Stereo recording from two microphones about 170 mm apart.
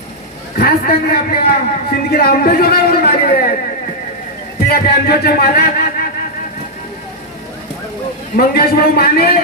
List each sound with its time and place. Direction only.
0.5 s a man's voice: 65° left (ahead or behind)
4.7 s a man's voice: 65° left (ahead or behind)
8.4 s a man's voice: 65° left (ahead or behind)